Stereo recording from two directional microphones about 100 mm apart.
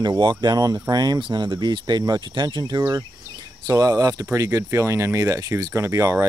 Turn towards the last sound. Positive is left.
turn(degrees=-30)  # may be behind; listen again after turning